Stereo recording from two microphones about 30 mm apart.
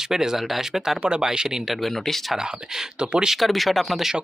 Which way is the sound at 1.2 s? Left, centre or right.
Right.